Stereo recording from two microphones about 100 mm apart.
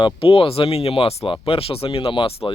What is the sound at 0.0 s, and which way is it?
Speech, 70° left (ahead or behind).